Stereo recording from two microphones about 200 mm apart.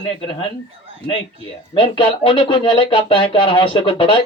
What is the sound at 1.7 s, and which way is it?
Speech, 25° left (ahead or behind).